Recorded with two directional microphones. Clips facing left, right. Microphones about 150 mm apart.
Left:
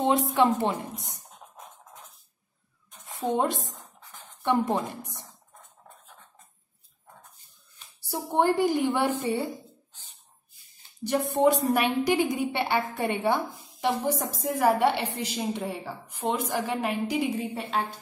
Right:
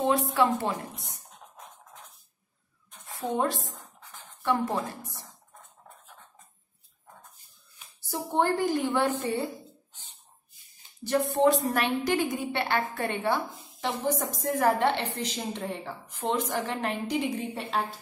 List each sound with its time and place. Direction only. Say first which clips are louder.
0.0 s a woman's voice: left 2 dB; 20° left (ahead or behind)
3.3 s a woman's voice: right 1 dB; 20° left (ahead or behind)
8.1 s a woman's voice: left 2 dB; 15° left (ahead or behind)
11.3 s a woman's voice: left 2 dB; 15° left (ahead or behind)